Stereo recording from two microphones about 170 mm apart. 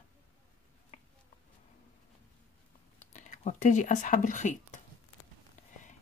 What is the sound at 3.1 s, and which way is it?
Speech, 45° left (ahead or behind).